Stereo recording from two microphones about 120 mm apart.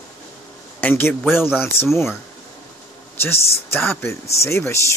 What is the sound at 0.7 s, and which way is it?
A man's voice, 15° left (ahead or behind).